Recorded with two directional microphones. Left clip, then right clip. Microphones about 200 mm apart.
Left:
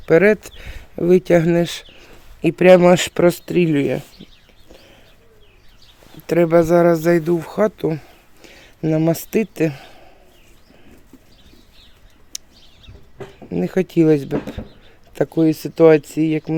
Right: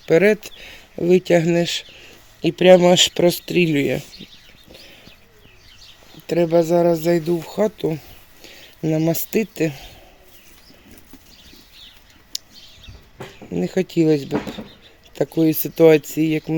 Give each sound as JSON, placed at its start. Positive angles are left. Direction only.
{"t": 0.1, "sound": "speech", "side_deg": 5}
{"t": 2.5, "sound": "speech", "side_deg": 5}
{"t": 4.7, "sound": "bird", "side_deg": -5}
{"t": 6.2, "sound": "speech", "side_deg": 15}
{"t": 12.3, "sound": "bird", "side_deg": 10}
{"t": 13.5, "sound": "speech", "side_deg": 10}